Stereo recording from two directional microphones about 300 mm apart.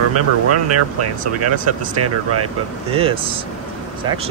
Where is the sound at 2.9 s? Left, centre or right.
Centre.